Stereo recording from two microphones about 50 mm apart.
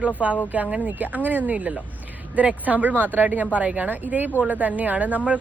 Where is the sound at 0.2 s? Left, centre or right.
Right.